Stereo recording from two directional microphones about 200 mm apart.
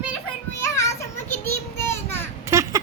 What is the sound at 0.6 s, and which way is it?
Children playing, 15° left (ahead or behind).